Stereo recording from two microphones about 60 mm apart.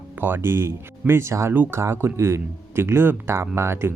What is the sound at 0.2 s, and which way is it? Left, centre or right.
Speech, right.